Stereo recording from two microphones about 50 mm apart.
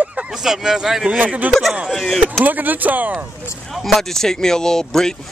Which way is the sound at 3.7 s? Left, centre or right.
Centre.